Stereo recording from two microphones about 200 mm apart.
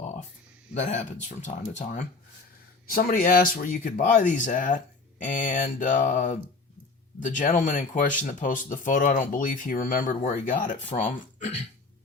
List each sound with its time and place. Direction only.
0.7 s speech: 35° left (ahead or behind)